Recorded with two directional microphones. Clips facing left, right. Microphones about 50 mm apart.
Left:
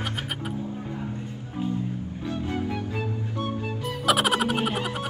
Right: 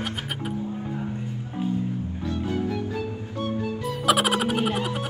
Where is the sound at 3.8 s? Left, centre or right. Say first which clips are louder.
Right 1 dB; centre.